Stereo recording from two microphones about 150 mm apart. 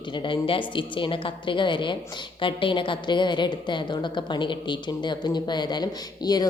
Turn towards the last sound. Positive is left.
turn(degrees=25)  # may be behind; listen again after turning